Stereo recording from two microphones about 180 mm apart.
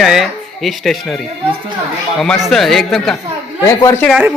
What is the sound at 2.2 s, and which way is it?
Speech, centre (ahead or behind).